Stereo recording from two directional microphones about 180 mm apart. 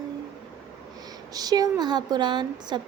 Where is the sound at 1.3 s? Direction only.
20° right (ahead or behind).